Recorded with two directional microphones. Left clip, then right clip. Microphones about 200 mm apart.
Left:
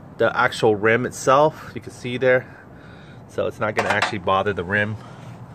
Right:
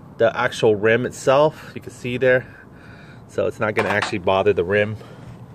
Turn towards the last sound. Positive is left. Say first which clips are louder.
# right 4 dB
turn(degrees=-25)  # may be behind; listen again after turning